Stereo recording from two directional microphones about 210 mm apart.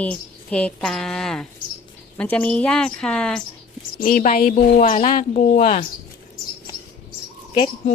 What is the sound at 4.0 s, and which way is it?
A woman's voice, 40° left (ahead or behind).